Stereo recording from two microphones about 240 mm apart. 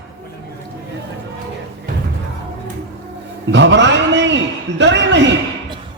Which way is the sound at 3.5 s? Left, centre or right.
Right.